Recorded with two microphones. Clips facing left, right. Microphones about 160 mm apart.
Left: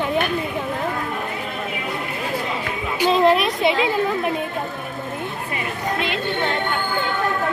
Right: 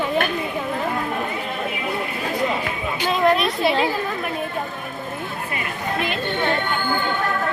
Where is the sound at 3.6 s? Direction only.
20° left (ahead or behind).